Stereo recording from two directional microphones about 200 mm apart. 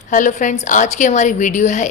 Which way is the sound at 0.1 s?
40° left (ahead or behind).